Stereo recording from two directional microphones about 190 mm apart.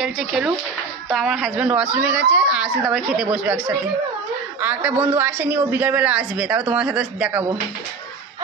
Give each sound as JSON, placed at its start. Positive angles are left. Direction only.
{"t": 0.0, "sound": "a woman's voice", "side_deg": 0}